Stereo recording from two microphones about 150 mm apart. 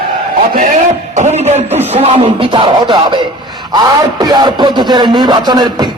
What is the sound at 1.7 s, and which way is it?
Speech, 15° right (ahead or behind).